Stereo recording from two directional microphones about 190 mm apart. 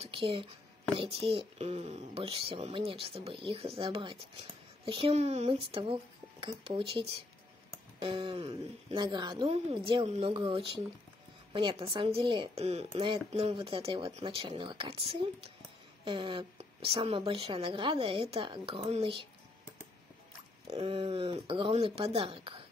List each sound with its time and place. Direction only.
0.0 s speech: 30° right (ahead or behind)
20.6 s speech: 30° right (ahead or behind)